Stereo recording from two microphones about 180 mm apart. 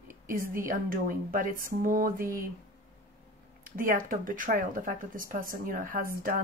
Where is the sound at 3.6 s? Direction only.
50° right (ahead or behind).